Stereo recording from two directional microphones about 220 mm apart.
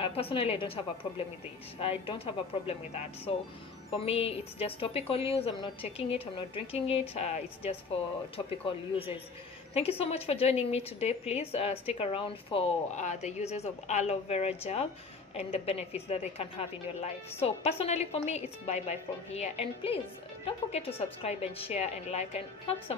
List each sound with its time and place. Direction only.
0.0 s a woman's voice: 25° left (ahead or behind)
4.0 s a woman's voice: 25° left (ahead or behind)